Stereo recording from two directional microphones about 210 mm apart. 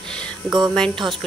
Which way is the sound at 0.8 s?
5° left (ahead or behind).